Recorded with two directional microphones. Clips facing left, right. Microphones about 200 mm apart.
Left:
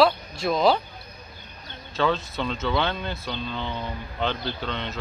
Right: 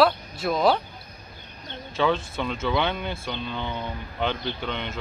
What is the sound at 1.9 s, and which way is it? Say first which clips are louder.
Speech: right 1 dB; 15° right (ahead or behind).